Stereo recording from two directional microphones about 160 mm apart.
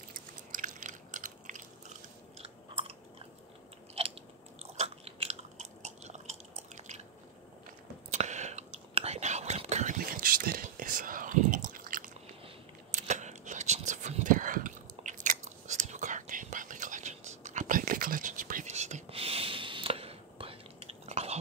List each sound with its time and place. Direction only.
0.3 s biting: 55° right (ahead or behind)
2.3 s chewing: 35° right (ahead or behind)
4.7 s biting: 40° right (ahead or behind)
8.1 s whispering: 45° right (ahead or behind)
12.9 s whispering: 45° right (ahead or behind)